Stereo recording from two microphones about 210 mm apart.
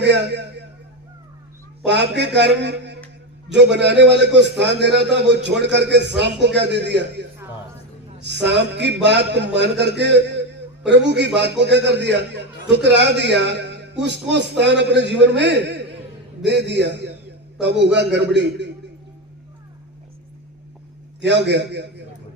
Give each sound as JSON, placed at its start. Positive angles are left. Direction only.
{"t": 0.0, "sound": "a man's voice", "side_deg": -55}
{"t": 1.8, "sound": "a man's voice", "side_deg": -55}
{"t": 21.2, "sound": "a man's voice", "side_deg": -55}